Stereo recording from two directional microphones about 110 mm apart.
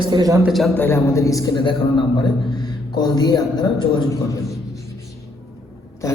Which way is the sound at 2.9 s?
40° left (ahead or behind).